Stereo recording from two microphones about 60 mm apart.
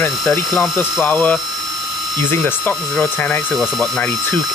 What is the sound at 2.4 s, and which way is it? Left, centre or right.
Speech, left.